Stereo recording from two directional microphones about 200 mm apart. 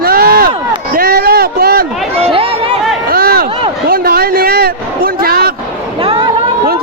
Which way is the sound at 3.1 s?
50° right (ahead or behind).